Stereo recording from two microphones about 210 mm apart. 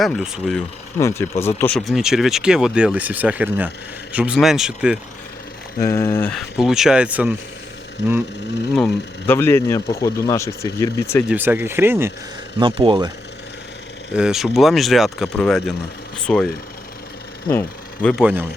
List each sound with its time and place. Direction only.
0.0 s speech: centre (ahead or behind)
0.9 s speech: 15° left (ahead or behind); by 4.9 s 5° right (ahead or behind)
5.8 s speech: 10° left (ahead or behind)
6.6 s speech: centre (ahead or behind)
8.7 s speech: 5° left (ahead or behind)
11.3 s speech: 10° right (ahead or behind)
12.5 s speech: 25° right (ahead or behind)
14.1 s speech: 5° right (ahead or behind)
18.2 s speech: 5° right (ahead or behind)